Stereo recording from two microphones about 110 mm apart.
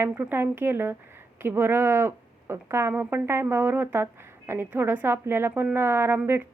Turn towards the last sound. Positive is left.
turn(degrees=-20)  # may be behind; listen again after turning